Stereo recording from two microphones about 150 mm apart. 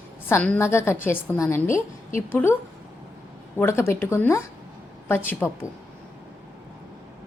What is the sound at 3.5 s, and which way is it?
A woman's voice, 15° left (ahead or behind).